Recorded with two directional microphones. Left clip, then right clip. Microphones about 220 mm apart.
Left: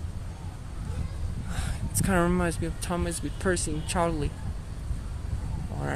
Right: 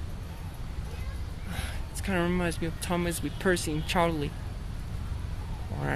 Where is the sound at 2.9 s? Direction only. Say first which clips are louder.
Right 2 dB; centre (ahead or behind).